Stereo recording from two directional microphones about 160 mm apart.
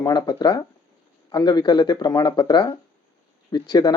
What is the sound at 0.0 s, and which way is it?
Speech, 25° left (ahead or behind).